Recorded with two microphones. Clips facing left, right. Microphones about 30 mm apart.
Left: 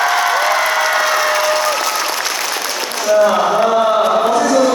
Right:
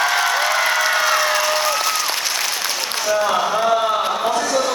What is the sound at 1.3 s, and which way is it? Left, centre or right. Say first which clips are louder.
Applause: left 4 dB; centre.